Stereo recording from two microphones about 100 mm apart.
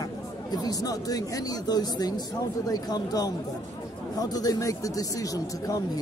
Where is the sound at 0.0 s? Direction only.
40° left (ahead or behind).